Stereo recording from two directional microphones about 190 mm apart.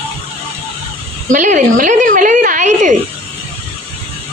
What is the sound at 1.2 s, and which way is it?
A woman's voice, 40° right (ahead or behind).